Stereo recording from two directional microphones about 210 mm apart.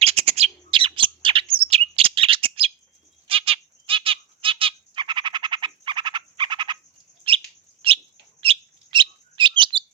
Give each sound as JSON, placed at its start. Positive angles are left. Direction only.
{"t": 0.0, "sound": "bird", "side_deg": -30}
{"t": 3.2, "sound": "squawk", "side_deg": -25}
{"t": 7.3, "sound": "bird", "side_deg": -25}
{"t": 8.4, "sound": "chirp", "side_deg": -25}